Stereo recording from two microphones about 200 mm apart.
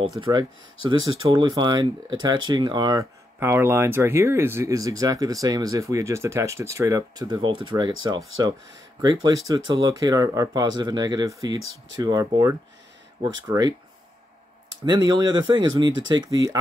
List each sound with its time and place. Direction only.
0.2 s speech: 20° right (ahead or behind)
14.9 s speech: 20° right (ahead or behind)